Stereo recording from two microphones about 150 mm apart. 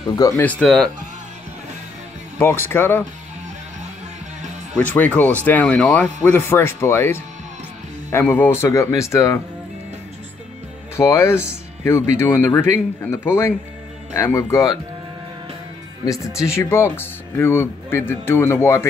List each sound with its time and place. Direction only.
0.4 s speech: 10° left (ahead or behind)
2.3 s speech: 15° left (ahead or behind)
4.7 s speech: 10° left (ahead or behind)
11.0 s speech: 20° left (ahead or behind)
16.1 s speech: 20° left (ahead or behind)